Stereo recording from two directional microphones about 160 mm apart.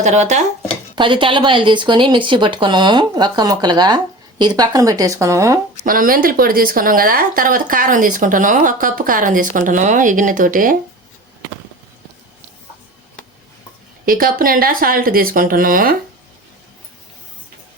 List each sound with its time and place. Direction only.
0.0 s speech: 45° right (ahead or behind)
0.9 s speech: 30° right (ahead or behind)
5.8 s speech: 60° right (ahead or behind)
14.0 s speech: 60° right (ahead or behind)